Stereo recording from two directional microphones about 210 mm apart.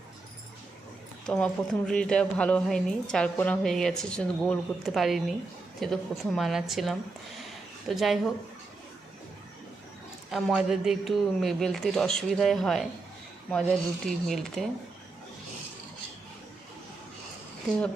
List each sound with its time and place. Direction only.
1.3 s a woman's voice: 5° left (ahead or behind)
10.3 s a woman's voice: centre (ahead or behind)